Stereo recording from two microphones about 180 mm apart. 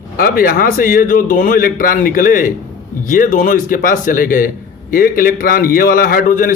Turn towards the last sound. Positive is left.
turn(degrees=50)  # may be behind; listen again after turning